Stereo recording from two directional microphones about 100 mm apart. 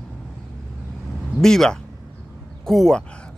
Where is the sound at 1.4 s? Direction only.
5° left (ahead or behind).